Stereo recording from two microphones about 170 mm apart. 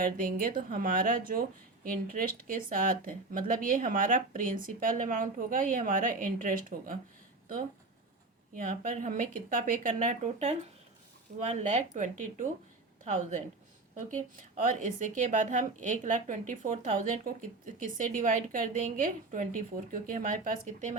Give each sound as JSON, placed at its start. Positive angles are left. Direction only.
{"t": 0.0, "sound": "speech", "side_deg": -55}
{"t": 9.0, "sound": "speech", "side_deg": -50}